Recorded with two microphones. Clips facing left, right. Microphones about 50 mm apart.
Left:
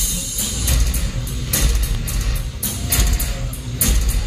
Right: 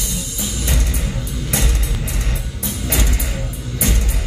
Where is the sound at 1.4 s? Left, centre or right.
Right.